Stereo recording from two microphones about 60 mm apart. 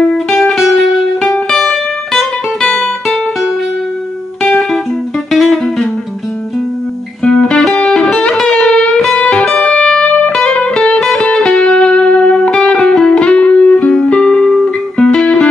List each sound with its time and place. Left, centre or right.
0.4 s music: centre
1.5 s music: centre
5.3 s music: centre
7.2 s music: centre